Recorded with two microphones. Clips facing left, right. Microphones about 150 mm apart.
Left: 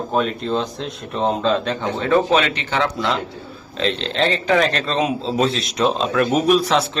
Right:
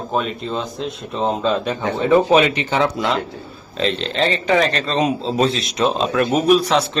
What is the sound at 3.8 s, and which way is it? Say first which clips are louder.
A man's voice: right 1 dB; centre (ahead or behind).